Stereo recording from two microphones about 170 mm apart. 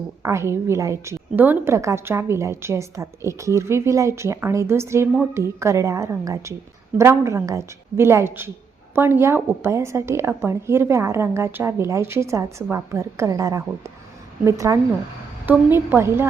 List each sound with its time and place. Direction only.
0.2 s a woman's voice: 15° right (ahead or behind)